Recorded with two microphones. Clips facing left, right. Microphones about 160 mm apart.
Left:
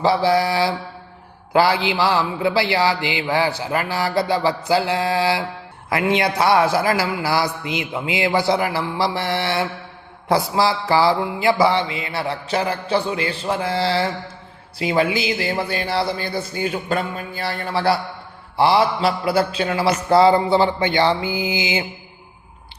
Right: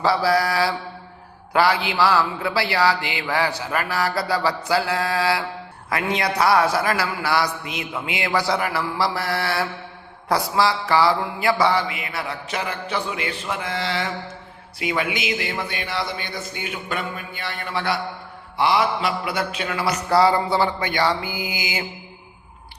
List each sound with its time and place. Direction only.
0.0 s a man's voice: 25° left (ahead or behind)